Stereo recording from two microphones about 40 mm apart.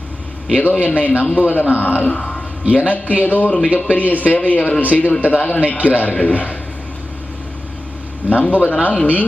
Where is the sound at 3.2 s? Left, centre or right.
Left.